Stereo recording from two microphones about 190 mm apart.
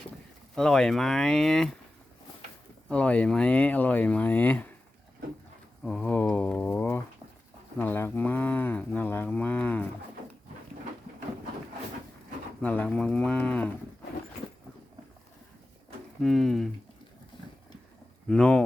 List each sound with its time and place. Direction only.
0.5 s speech: 5° left (ahead or behind)
2.9 s speech: 5° left (ahead or behind)
5.8 s speech: 5° left (ahead or behind)
12.6 s speech: 10° left (ahead or behind)
16.2 s speech: centre (ahead or behind)
17.3 s a sound: 25° left (ahead or behind)
18.3 s speech: 5° left (ahead or behind)